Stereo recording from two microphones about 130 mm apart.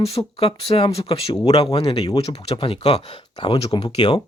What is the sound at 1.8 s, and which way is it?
Speech, 30° left (ahead or behind).